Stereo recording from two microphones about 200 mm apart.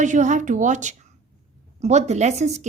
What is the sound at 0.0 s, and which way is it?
A woman's voice, 40° right (ahead or behind).